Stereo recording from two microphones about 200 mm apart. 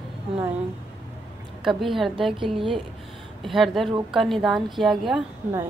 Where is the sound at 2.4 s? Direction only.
25° right (ahead or behind).